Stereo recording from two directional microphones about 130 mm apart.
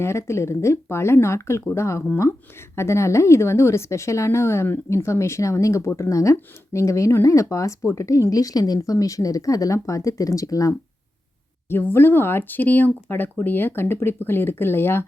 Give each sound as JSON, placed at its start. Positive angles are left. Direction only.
{"t": 0.0, "sound": "a woman's voice", "side_deg": 20}